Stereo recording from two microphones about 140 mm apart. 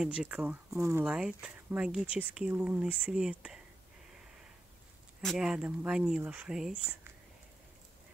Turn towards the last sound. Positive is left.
turn(degrees=-5)  # may be behind; listen again after turning